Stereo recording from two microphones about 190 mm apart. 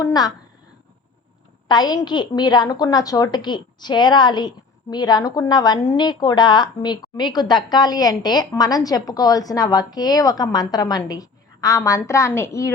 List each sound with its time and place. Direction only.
0.0 s a woman's voice: 20° left (ahead or behind)
1.6 s a woman's voice: 20° left (ahead or behind)